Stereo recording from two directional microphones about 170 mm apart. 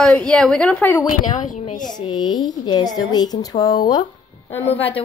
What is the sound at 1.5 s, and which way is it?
Speech, 50° left (ahead or behind).